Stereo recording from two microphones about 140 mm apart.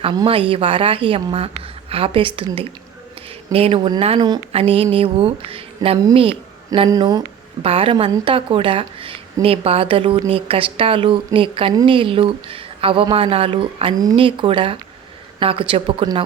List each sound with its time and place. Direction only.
0.0 s a woman's voice: 35° right (ahead or behind)
3.5 s a woman's voice: 40° right (ahead or behind)
6.7 s speech: 30° right (ahead or behind)
7.6 s a woman's voice: 40° right (ahead or behind)
13.9 s speech: 25° right (ahead or behind)
14.2 s a woman's voice: 40° right (ahead or behind)